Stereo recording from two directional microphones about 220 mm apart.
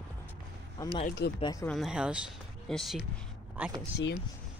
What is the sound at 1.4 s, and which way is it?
Speech, 15° left (ahead or behind).